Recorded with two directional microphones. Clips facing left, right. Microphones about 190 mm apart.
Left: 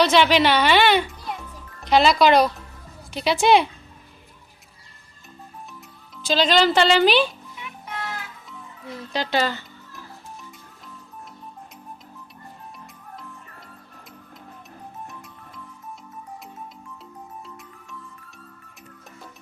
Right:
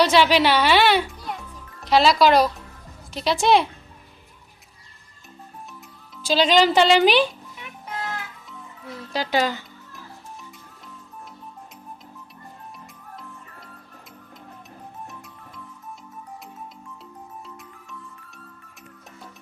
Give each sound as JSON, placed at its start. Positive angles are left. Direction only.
{"t": 0.0, "sound": "a child's voice", "side_deg": -5}
{"t": 6.2, "sound": "speech", "side_deg": -10}
{"t": 8.4, "sound": "speech", "side_deg": -5}